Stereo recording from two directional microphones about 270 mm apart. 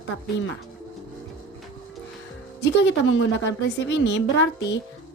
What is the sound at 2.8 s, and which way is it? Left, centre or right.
A woman's voice, left.